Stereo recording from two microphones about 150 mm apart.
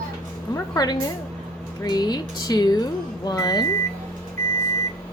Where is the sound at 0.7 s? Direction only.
30° left (ahead or behind).